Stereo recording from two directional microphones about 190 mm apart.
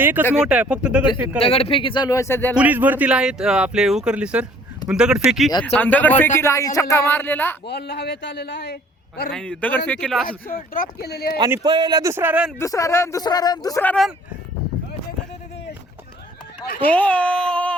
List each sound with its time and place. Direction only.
0.0 s speech: 10° right (ahead or behind)
1.4 s speech: 30° left (ahead or behind); by 2.6 s 10° left (ahead or behind)
2.6 s speech: 10° right (ahead or behind)
5.7 s speech: 10° left (ahead or behind)
7.7 s a man's voice: 60° left (ahead or behind)
9.3 s speech: 5° left (ahead or behind)
10.8 s a man's voice: 55° left (ahead or behind)
11.3 s speech: 20° right (ahead or behind)
12.5 s speech: 15° left (ahead or behind)
16.8 s speech: 10° left (ahead or behind)